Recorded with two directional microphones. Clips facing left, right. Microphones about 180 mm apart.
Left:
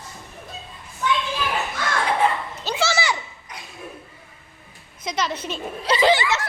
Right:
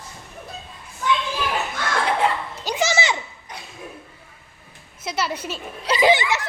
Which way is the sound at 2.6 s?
15° right (ahead or behind).